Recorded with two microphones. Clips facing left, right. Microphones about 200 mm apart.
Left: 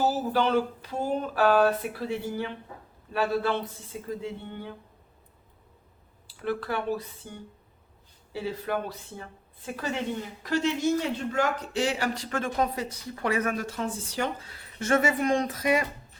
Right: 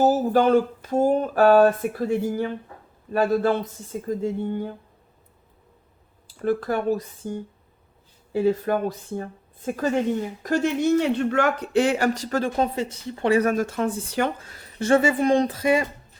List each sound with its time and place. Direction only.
0.0 s speech: 45° right (ahead or behind)
6.2 s speech: 45° right (ahead or behind)
13.5 s a woman's voice: 50° right (ahead or behind); by 15.9 s 25° right (ahead or behind)